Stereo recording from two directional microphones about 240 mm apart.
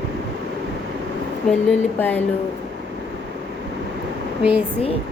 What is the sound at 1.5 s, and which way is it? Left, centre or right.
Speech, centre.